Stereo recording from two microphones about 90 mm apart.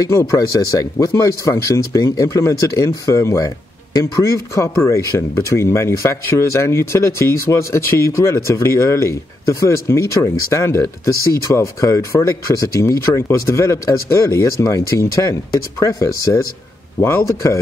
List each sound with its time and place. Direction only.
0.0 s speech: 35° left (ahead or behind)
17.0 s speech: 30° left (ahead or behind)